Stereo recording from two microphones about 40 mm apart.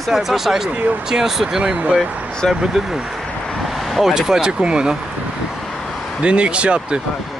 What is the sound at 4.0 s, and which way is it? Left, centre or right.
Speech, centre.